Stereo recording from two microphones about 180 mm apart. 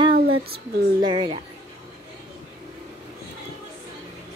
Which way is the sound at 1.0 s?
25° right (ahead or behind).